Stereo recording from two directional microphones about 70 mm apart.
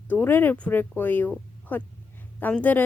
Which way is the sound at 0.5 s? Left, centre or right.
Centre.